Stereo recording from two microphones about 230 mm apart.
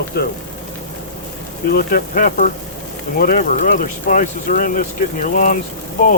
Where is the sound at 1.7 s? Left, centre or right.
Left.